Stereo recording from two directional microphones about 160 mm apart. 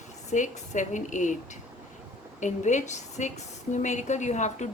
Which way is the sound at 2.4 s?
50° left (ahead or behind).